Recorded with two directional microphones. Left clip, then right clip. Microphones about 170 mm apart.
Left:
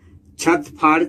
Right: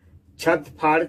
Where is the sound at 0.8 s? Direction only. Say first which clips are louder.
Left 5 dB; 25° left (ahead or behind).